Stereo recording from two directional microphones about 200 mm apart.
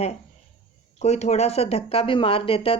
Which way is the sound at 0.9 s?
35° left (ahead or behind).